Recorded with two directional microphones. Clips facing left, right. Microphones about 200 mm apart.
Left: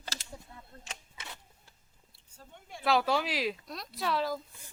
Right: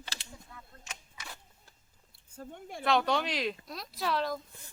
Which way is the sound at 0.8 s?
30° left (ahead or behind).